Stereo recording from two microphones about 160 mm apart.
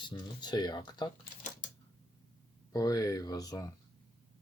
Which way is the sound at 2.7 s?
25° left (ahead or behind).